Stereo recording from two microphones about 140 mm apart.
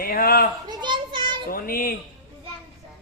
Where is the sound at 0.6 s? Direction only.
30° right (ahead or behind).